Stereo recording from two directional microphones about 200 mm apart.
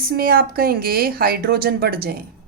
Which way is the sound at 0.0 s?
50° right (ahead or behind).